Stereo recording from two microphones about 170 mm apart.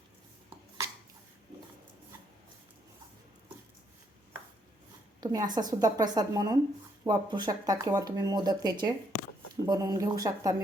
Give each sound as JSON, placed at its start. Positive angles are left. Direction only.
{"t": 5.2, "sound": "speech", "side_deg": -25}